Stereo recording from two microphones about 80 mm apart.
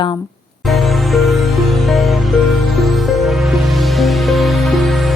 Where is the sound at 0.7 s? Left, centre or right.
Centre.